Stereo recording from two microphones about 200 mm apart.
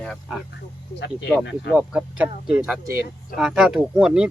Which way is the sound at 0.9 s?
60° left (ahead or behind).